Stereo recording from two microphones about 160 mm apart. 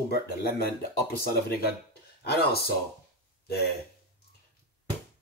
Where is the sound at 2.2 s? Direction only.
80° left.